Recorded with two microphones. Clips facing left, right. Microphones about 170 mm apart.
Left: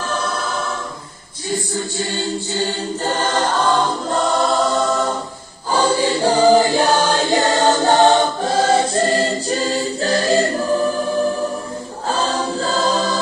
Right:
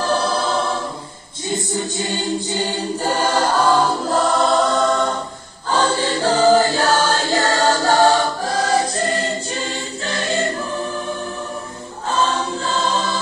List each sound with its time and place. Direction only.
0.0 s choir: 35° right (ahead or behind)
1.5 s choir: 20° right (ahead or behind); by 10.4 s 35° left (ahead or behind)
12.1 s choir: 35° left (ahead or behind)